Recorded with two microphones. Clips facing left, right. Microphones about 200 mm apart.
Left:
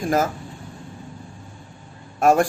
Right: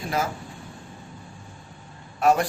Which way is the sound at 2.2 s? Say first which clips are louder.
Left 4 dB; 50° left (ahead or behind).